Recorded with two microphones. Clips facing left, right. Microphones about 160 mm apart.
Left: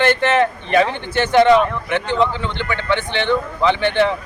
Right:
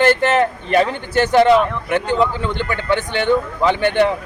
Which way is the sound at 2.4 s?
45° right (ahead or behind).